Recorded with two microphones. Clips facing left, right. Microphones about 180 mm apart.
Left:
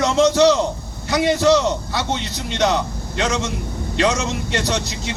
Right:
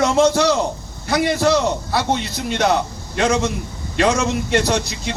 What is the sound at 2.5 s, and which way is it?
Speech, 55° right (ahead or behind).